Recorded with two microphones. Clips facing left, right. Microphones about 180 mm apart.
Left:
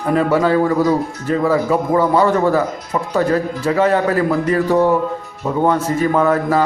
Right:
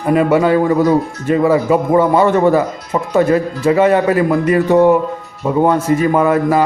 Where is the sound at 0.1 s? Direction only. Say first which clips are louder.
Right 3 dB; 15° right (ahead or behind).